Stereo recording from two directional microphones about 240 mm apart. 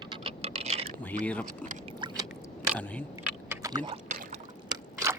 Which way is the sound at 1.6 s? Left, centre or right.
Right.